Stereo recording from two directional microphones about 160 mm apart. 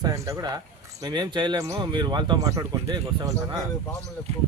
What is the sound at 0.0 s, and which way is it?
Speech, 25° right (ahead or behind).